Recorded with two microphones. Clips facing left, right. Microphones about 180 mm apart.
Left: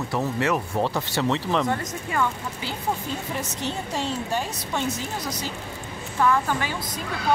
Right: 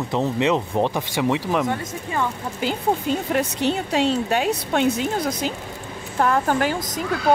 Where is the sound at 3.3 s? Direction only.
75° right (ahead or behind); by 7.0 s 50° right (ahead or behind).